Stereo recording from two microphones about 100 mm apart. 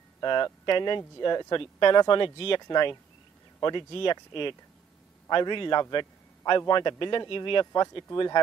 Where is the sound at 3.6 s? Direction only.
55° left (ahead or behind).